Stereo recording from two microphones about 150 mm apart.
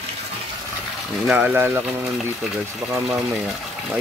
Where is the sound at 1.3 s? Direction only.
10° right (ahead or behind).